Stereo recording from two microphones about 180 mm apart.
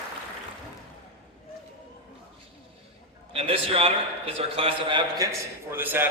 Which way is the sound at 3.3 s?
30° right (ahead or behind).